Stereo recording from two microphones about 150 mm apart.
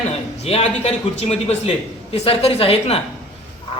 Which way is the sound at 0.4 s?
45° left (ahead or behind).